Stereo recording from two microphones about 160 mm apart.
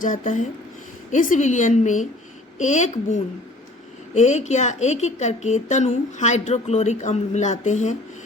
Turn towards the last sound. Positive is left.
turn(degrees=45)  # may be behind; listen again after turning